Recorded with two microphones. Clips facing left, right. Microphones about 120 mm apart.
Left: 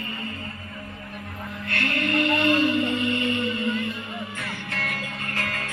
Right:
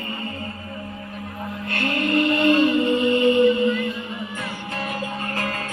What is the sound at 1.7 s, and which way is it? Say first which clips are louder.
Music: right 3 dB; 25° right (ahead or behind).